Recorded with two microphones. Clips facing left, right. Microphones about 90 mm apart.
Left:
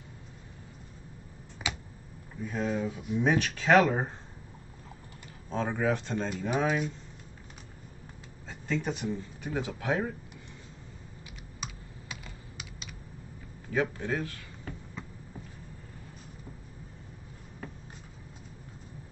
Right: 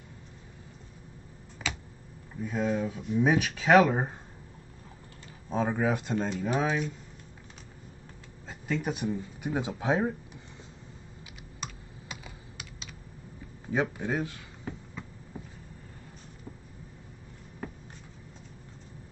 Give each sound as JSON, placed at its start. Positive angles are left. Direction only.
{"t": 1.6, "sound": "a sound", "side_deg": 15}
{"t": 2.4, "sound": "speech", "side_deg": -5}
{"t": 3.2, "sound": "speech", "side_deg": -10}
{"t": 5.5, "sound": "speech", "side_deg": -10}
{"t": 6.2, "sound": "speech", "side_deg": 5}
{"t": 8.5, "sound": "speech", "side_deg": -5}
{"t": 11.6, "sound": "computer keyboard", "side_deg": 0}
{"t": 13.7, "sound": "speech", "side_deg": -20}